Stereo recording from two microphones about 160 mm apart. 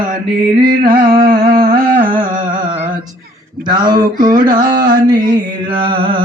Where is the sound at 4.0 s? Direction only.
55° right (ahead or behind).